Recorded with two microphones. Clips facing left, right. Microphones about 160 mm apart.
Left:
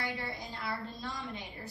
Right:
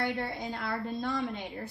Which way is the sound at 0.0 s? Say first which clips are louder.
Right 6 dB; 55° right (ahead or behind).